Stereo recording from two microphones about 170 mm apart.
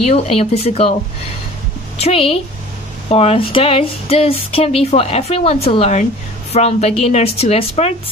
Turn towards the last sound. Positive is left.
turn(degrees=35)  # may be behind; listen again after turning